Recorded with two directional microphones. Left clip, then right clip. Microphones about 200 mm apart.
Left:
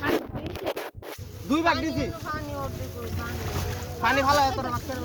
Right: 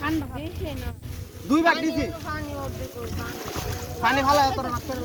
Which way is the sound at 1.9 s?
55° left (ahead or behind).